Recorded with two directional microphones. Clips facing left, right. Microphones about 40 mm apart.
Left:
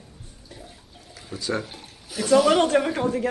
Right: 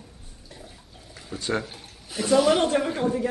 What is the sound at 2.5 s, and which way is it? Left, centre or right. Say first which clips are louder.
Speech: left 2 dB; left.